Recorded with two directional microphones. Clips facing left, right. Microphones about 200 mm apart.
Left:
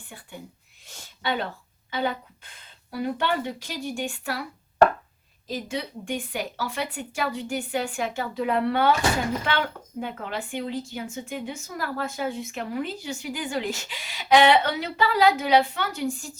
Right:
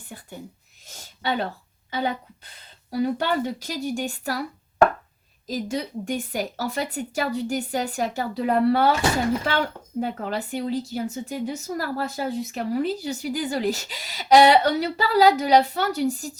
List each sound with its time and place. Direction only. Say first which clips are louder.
0.9 s speech: right 2 dB; 40° right (ahead or behind)
2.9 s a woman's voice: right 3 dB; 40° right (ahead or behind)
5.5 s a woman's voice: right 3 dB; 40° right (ahead or behind)